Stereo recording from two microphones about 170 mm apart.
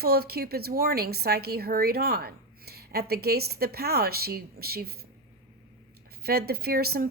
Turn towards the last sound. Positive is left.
turn(degrees=-65)  # may be behind; listen again after turning